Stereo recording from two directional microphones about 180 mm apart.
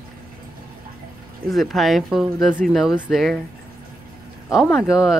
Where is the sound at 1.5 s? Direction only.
Centre (ahead or behind).